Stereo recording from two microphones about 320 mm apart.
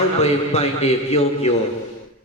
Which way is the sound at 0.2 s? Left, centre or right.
Centre.